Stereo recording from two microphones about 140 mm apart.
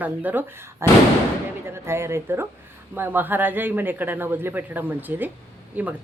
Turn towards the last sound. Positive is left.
turn(degrees=-10)  # may be behind; listen again after turning